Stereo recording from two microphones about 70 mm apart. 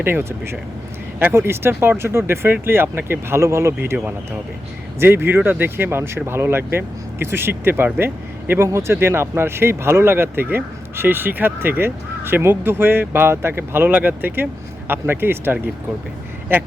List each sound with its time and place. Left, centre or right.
0.0 s speech: right
4.9 s speech: right